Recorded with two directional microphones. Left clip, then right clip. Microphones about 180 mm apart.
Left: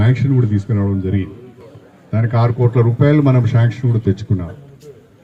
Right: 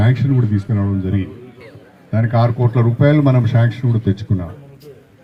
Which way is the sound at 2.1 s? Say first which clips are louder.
Right 1 dB; 45° right (ahead or behind).